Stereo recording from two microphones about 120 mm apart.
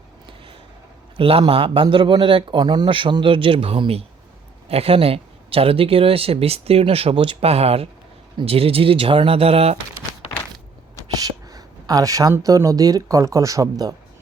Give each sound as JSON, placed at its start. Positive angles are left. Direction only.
{"t": 1.1, "sound": "speech", "side_deg": -50}
{"t": 11.2, "sound": "a sound", "side_deg": -30}
{"t": 12.4, "sound": "speech", "side_deg": -30}